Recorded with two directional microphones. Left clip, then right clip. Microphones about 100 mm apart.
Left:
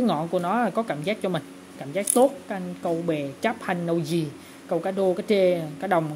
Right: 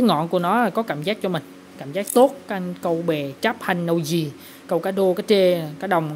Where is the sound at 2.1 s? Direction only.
35° right (ahead or behind).